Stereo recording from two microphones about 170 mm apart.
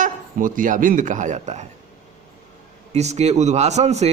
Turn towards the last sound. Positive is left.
turn(degrees=-40)  # may be behind; listen again after turning